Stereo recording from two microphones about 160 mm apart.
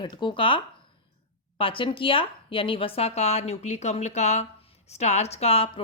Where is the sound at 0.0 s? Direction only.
30° left (ahead or behind).